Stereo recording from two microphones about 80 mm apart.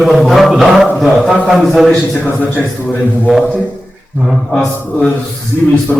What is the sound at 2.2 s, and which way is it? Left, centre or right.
Speech, left.